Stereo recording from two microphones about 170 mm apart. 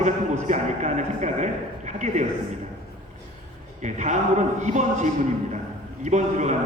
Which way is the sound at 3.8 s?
45° right (ahead or behind).